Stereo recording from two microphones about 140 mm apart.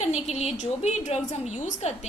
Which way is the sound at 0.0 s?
55° left (ahead or behind).